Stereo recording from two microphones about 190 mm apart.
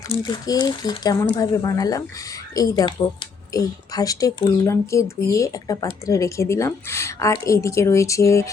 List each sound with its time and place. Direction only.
0.1 s speech: 20° left (ahead or behind)